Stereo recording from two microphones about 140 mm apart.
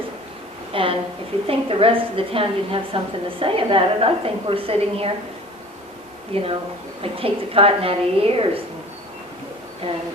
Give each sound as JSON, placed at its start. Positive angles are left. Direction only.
{"t": 0.7, "sound": "a woman's voice", "side_deg": -40}
{"t": 6.3, "sound": "a woman's voice", "side_deg": -40}